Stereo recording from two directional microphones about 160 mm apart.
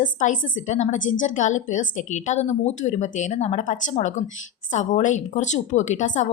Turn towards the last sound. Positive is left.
turn(degrees=50)  # may be behind; listen again after turning